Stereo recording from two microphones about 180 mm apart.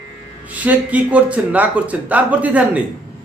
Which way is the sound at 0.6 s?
10° right (ahead or behind).